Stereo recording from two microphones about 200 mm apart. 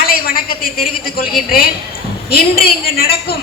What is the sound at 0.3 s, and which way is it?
Speech, 45° left (ahead or behind).